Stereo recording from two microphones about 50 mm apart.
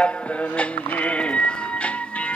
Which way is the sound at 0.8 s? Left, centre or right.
Left.